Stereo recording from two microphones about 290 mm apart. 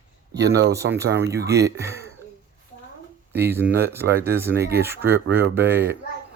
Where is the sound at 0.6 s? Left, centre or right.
Centre.